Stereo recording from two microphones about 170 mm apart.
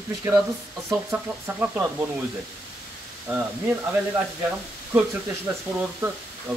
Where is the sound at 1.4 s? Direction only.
10° right (ahead or behind).